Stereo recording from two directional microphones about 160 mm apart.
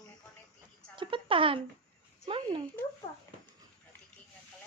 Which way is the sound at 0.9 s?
30° right (ahead or behind).